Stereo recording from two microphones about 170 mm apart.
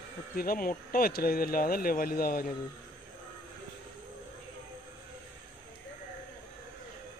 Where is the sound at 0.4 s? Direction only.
60° left (ahead or behind).